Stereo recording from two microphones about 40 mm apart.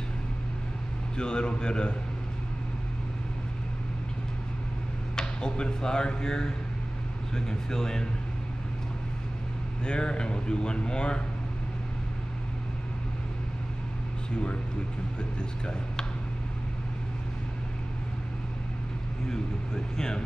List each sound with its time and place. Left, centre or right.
1.1 s speech: left
5.1 s speech: centre
9.8 s speech: left
14.3 s speech: left
19.2 s speech: centre